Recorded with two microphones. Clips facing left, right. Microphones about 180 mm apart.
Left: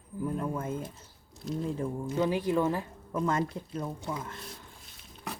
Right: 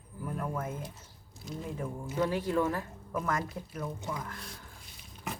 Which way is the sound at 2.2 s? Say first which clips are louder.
Left 2 dB; 15° left (ahead or behind).